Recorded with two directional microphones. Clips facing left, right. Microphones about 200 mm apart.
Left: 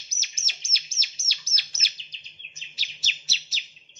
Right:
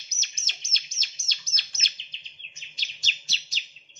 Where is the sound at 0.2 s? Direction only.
10° left (ahead or behind).